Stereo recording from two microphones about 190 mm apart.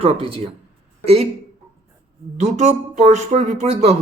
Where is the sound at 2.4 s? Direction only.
35° right (ahead or behind).